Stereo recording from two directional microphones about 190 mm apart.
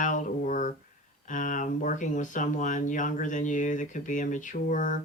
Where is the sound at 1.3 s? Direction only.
45° left (ahead or behind).